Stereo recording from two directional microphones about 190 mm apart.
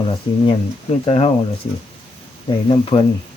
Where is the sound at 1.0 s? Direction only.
30° left (ahead or behind).